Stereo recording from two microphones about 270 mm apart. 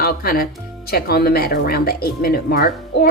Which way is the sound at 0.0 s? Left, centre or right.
Left.